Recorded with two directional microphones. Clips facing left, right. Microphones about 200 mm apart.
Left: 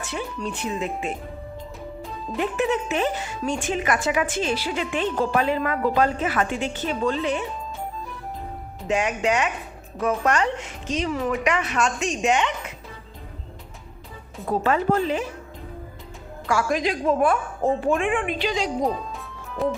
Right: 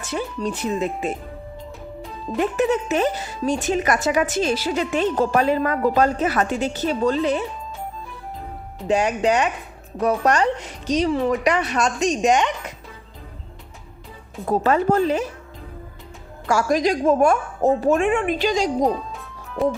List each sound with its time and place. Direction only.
0.0 s speech: 40° right (ahead or behind)
2.4 s speech: 40° right (ahead or behind)
8.9 s speech: 35° right (ahead or behind)
14.4 s speech: 45° right (ahead or behind)
16.5 s a woman's voice: 40° right (ahead or behind)
19.1 s music: centre (ahead or behind)